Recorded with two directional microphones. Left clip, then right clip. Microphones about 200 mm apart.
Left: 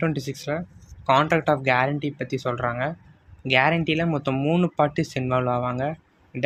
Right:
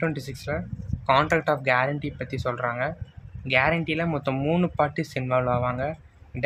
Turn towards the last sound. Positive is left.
turn(degrees=10)  # may be behind; listen again after turning